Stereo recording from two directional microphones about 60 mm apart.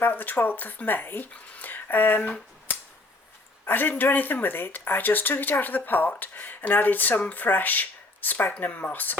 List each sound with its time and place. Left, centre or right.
0.0 s speech: left
3.7 s speech: left